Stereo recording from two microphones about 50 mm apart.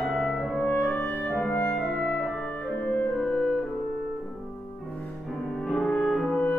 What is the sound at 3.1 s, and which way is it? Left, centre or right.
Music, centre.